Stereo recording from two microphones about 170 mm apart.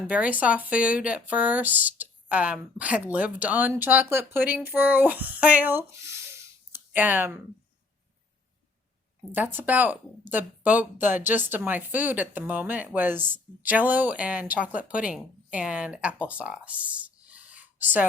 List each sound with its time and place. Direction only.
0.1 s speech: 10° right (ahead or behind)
9.3 s speech: 10° right (ahead or behind)
16.3 s a sound: 10° right (ahead or behind)